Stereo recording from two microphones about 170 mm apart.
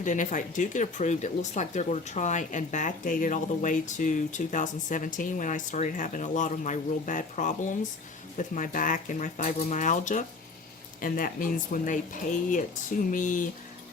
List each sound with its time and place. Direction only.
0.0 s speech: 50° left (ahead or behind)